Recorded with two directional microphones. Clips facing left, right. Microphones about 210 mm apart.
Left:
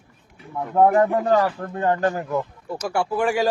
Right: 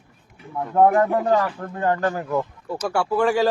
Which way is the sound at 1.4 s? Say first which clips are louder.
Left 2 dB; 25° left (ahead or behind).